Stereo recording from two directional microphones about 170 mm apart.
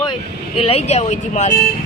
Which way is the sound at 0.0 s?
30° left (ahead or behind).